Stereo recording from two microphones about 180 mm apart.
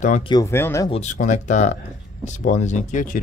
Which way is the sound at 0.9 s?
40° left (ahead or behind).